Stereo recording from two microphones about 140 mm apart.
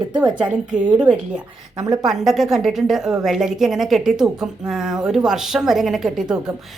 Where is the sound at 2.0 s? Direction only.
Centre (ahead or behind).